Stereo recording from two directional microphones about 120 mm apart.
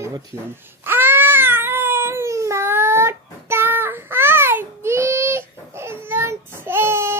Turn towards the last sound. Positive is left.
turn(degrees=-20)  # may be behind; listen again after turning